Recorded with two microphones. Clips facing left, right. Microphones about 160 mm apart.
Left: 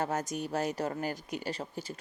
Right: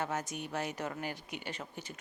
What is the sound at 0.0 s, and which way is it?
Speech, 40° left (ahead or behind).